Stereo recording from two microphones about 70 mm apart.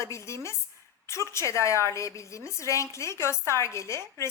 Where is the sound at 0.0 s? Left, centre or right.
Left.